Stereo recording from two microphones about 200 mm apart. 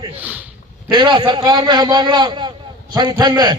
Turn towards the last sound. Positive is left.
turn(degrees=-20)  # may be behind; listen again after turning